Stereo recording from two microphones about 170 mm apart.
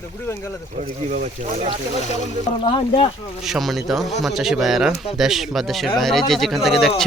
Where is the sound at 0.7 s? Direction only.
45° right (ahead or behind).